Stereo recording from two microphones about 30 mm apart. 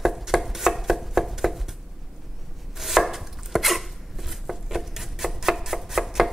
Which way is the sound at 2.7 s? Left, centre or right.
Centre.